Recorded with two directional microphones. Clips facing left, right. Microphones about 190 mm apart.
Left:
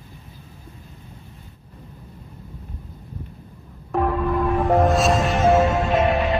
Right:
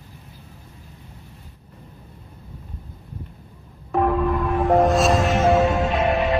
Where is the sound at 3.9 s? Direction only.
Centre (ahead or behind).